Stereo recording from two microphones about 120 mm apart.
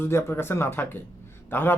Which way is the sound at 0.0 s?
20° left (ahead or behind).